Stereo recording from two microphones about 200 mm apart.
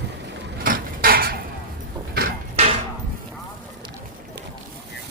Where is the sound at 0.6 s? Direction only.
45° right (ahead or behind).